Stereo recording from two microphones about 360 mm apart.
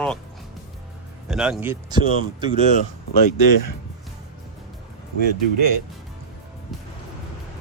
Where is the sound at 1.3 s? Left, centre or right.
Centre.